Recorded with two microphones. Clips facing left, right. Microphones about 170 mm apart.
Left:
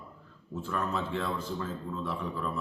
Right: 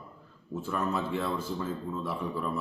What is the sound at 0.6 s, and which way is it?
Speech, 5° right (ahead or behind).